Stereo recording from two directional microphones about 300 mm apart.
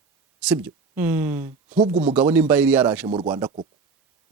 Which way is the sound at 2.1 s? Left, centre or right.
Centre.